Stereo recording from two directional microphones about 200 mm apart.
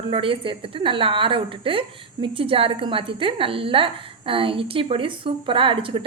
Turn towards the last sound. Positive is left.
turn(degrees=-25)  # may be behind; listen again after turning